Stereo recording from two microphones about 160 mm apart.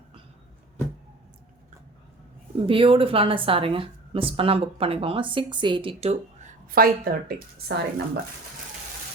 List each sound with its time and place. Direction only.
2.6 s speech: 35° right (ahead or behind)
6.7 s a woman's voice: 65° right (ahead or behind); by 8.2 s 90° right